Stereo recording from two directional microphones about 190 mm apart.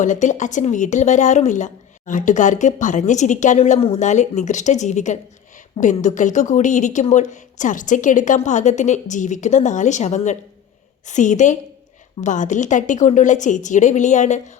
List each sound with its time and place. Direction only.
0.0 s speech: 40° left (ahead or behind)